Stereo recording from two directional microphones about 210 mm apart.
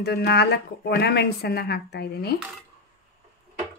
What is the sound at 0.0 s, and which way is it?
Speech, 50° left (ahead or behind).